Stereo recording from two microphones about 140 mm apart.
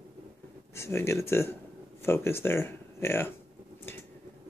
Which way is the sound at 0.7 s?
20° left (ahead or behind).